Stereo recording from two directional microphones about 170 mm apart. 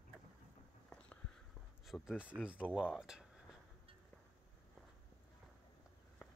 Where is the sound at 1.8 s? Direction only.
5° right (ahead or behind).